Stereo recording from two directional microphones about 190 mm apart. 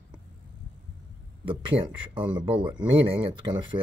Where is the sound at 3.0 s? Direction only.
30° right (ahead or behind).